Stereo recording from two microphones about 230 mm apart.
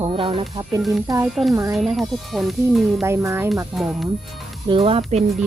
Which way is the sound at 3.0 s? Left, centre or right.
Centre.